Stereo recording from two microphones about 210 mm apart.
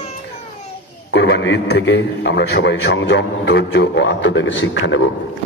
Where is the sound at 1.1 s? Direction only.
60° left (ahead or behind).